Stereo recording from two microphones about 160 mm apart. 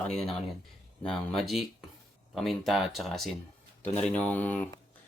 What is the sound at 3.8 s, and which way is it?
Speech, 15° left (ahead or behind).